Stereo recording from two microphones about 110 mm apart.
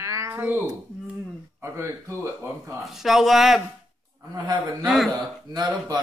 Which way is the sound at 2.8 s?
Centre (ahead or behind).